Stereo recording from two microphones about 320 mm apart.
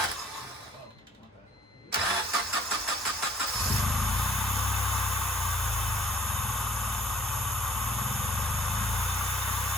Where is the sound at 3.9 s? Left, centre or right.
Centre.